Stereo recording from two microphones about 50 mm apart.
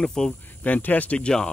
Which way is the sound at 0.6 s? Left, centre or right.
Left.